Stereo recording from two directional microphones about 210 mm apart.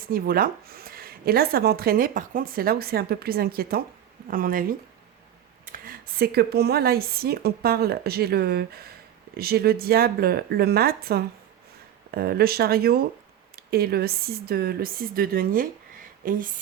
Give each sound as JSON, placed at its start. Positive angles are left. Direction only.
{"t": 0.0, "sound": "a woman's voice", "side_deg": -45}
{"t": 5.6, "sound": "a woman's voice", "side_deg": -40}